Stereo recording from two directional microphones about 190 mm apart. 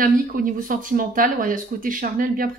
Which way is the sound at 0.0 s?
45° right (ahead or behind).